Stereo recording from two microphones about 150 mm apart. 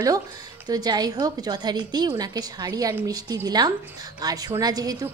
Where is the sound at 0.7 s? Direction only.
25° right (ahead or behind).